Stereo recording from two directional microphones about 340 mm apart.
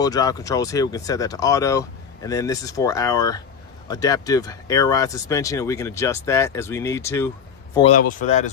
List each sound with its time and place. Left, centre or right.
0.0 s speech: centre